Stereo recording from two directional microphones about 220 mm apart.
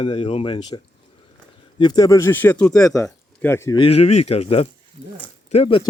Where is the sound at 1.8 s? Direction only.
20° left (ahead or behind).